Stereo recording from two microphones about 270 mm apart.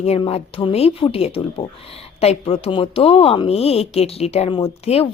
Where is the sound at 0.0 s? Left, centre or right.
Left.